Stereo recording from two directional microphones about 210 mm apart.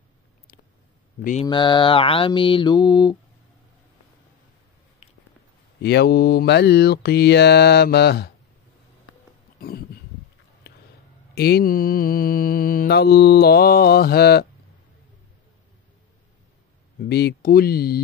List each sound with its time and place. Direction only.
1.4 s mantra: 20° left (ahead or behind)
5.0 s a sound: 30° left (ahead or behind)
5.8 s mantra: 55° left (ahead or behind)
9.6 s a sound: 45° left (ahead or behind)
11.3 s mantra: 50° left (ahead or behind)
17.0 s mantra: 50° left (ahead or behind)